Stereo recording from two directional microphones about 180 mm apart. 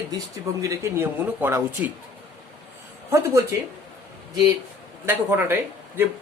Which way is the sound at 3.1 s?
15° right (ahead or behind).